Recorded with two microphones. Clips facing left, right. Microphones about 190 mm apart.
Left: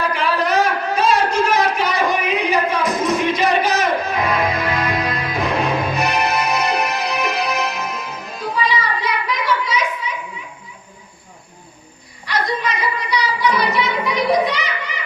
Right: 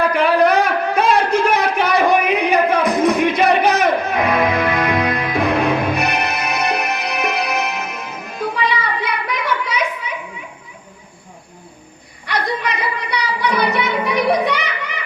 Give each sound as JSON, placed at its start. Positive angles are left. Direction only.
{"t": 0.1, "sound": "a sound", "side_deg": -60}
{"t": 4.8, "sound": "music", "side_deg": -60}
{"t": 12.2, "sound": "music", "side_deg": -60}